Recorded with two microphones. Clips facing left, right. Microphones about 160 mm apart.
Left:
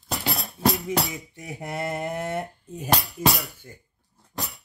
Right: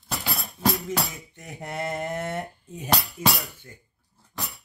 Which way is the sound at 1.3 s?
10° left (ahead or behind).